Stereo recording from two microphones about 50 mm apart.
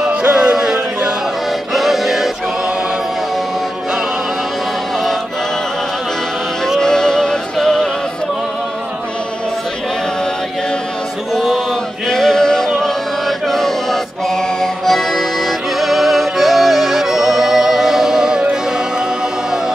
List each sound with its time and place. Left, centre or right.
0.1 s music: right; by 2.3 s centre
6.8 s music: centre
12.1 s music: centre
13.5 s chant: centre
14.3 s music: centre